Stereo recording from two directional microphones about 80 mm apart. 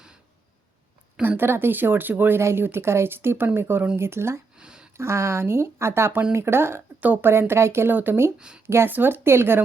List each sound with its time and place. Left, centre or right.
1.4 s speech: right
4.5 s a sound: centre
4.9 s speech: right
8.4 s speech: centre
8.6 s speech: right